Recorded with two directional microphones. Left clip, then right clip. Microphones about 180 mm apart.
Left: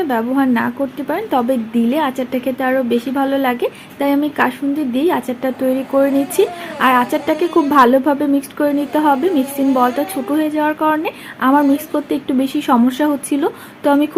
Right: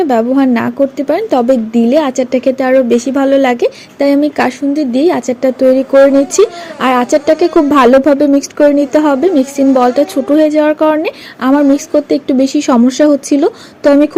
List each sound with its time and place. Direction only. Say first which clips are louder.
0.1 s a woman's voice: right 6 dB; 40° right (ahead or behind)